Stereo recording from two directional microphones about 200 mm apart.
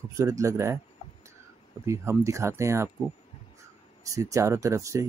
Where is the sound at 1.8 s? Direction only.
15° right (ahead or behind).